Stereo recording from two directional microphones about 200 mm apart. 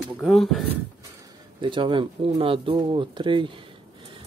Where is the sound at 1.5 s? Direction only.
25° right (ahead or behind).